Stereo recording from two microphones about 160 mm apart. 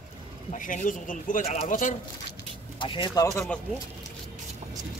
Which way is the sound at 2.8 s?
30° left (ahead or behind).